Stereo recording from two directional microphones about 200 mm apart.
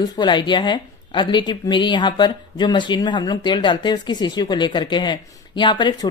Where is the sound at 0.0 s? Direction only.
20° left (ahead or behind).